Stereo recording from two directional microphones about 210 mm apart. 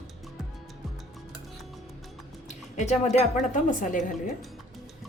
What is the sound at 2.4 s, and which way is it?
A woman's voice, 35° left (ahead or behind).